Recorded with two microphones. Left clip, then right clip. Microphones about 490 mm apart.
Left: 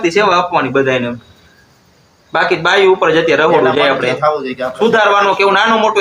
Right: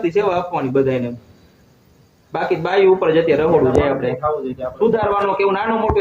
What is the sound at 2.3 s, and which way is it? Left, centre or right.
A man's voice, right.